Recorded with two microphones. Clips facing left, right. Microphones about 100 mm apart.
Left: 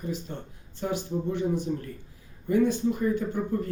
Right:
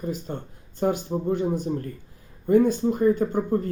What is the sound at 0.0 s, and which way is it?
A man's voice, 45° right (ahead or behind).